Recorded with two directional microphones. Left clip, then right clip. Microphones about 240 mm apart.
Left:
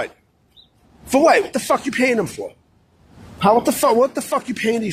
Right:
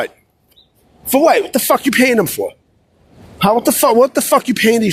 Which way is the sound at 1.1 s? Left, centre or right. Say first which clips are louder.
Right 3 dB; right.